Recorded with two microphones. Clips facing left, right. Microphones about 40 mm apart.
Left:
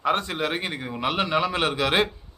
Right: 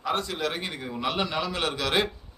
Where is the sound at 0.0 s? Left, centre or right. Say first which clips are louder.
Left 4 dB; left.